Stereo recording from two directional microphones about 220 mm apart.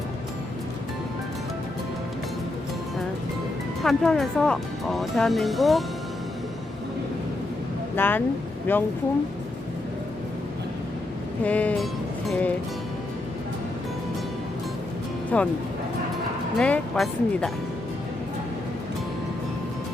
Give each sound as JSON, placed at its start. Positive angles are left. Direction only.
{"t": 3.8, "sound": "speech", "side_deg": 0}
{"t": 7.9, "sound": "speech", "side_deg": 10}
{"t": 11.4, "sound": "speech", "side_deg": 5}
{"t": 15.3, "sound": "speech", "side_deg": 5}
{"t": 16.6, "sound": "speech", "side_deg": 5}